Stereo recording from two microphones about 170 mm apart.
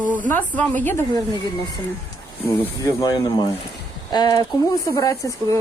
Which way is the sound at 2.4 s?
20° left (ahead or behind).